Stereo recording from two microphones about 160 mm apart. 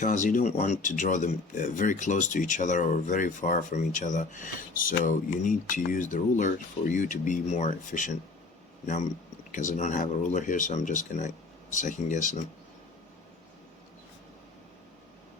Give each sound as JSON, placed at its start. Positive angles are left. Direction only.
{"t": 0.0, "sound": "speech", "side_deg": 50}
{"t": 9.5, "sound": "speech", "side_deg": 55}